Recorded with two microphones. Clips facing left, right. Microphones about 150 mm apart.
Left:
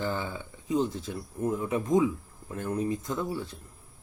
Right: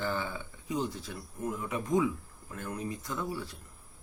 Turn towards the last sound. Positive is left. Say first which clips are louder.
# left 4 dB
turn(degrees=25)  # may be behind; listen again after turning